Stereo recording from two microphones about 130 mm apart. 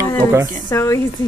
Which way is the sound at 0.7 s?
20° left (ahead or behind).